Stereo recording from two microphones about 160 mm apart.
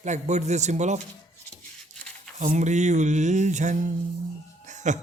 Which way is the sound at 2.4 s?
45° right (ahead or behind).